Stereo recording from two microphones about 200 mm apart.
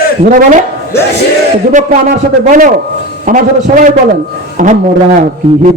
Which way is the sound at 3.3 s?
40° right (ahead or behind).